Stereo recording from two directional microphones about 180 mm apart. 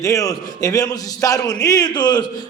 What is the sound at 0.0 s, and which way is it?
A man's voice, 20° left (ahead or behind).